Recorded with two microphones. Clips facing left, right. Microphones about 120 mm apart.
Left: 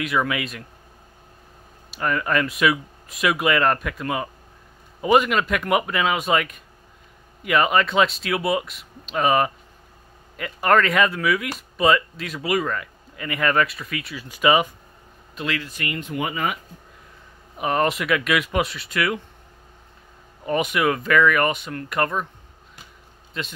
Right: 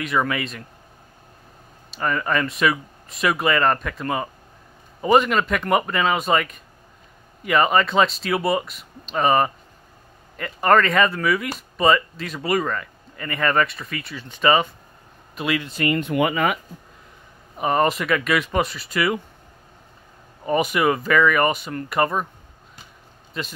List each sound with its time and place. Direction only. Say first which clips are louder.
0.0 s speech: right 1 dB; centre (ahead or behind)
2.0 s speech: even; centre (ahead or behind)
15.3 s speech: right 3 dB; 10° right (ahead or behind)
15.6 s speech: right 8 dB; 30° right (ahead or behind)
16.0 s speech: right 3 dB; 70° right (ahead or behind)
17.6 s speech: right 2 dB; centre (ahead or behind)
20.4 s speech: right 2 dB; centre (ahead or behind)
23.3 s speech: right 1 dB; centre (ahead or behind)